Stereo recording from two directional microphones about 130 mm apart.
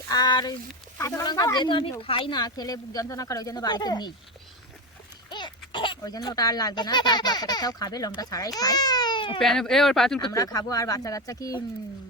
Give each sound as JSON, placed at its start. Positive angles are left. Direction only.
{"t": 0.1, "sound": "speech", "side_deg": 30}
{"t": 5.3, "sound": "a sound", "side_deg": 40}
{"t": 6.0, "sound": "speech", "side_deg": 30}
{"t": 9.4, "sound": "speech", "side_deg": 5}
{"t": 10.3, "sound": "speech", "side_deg": 25}